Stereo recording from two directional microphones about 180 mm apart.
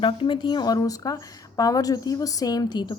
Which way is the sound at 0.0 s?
30° left (ahead or behind).